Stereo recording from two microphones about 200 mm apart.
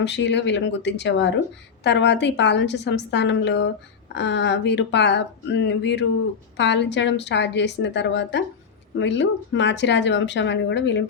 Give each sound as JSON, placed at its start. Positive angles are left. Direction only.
{"t": 0.0, "sound": "speech", "side_deg": 60}